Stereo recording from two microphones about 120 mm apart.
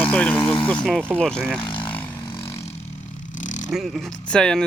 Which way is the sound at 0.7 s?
5° left (ahead or behind).